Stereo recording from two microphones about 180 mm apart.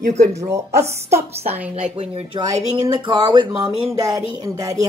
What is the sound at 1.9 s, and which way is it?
Speech, 35° right (ahead or behind).